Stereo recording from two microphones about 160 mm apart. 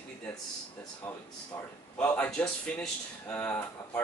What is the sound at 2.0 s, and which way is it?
Speech, 10° left (ahead or behind).